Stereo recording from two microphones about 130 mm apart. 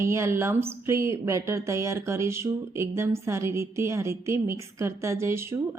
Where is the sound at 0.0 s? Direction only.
20° right (ahead or behind).